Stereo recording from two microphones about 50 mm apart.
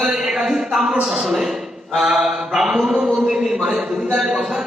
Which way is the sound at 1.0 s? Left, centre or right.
Centre.